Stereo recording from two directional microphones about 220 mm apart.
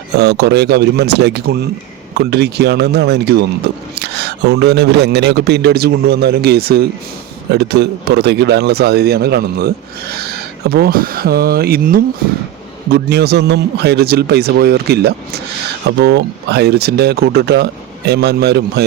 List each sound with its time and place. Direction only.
0.2 s a man's voice: 50° right (ahead or behind)